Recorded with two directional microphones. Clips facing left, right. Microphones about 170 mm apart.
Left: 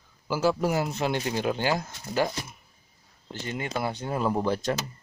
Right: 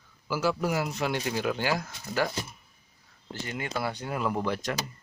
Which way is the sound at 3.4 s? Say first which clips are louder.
Left 2 dB; 25° left (ahead or behind).